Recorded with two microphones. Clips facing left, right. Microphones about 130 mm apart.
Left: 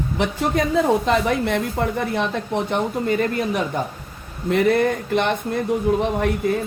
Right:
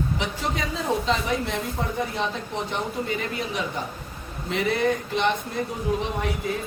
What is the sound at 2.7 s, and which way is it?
Speech, 50° left (ahead or behind).